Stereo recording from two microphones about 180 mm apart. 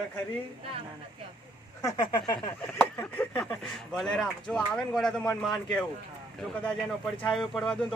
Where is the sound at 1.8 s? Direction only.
20° left (ahead or behind).